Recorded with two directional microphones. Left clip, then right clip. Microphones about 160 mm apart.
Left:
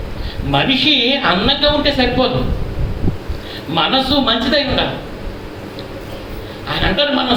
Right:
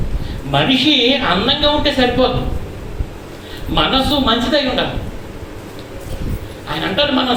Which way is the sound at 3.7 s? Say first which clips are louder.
Even; 35° left (ahead or behind).